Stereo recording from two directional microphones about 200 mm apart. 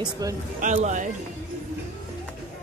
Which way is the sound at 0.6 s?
40° right (ahead or behind).